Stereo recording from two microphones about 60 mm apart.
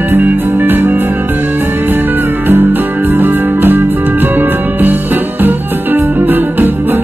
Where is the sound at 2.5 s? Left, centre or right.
Right.